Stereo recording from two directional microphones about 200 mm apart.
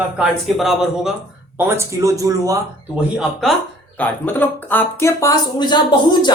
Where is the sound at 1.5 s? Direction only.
10° right (ahead or behind).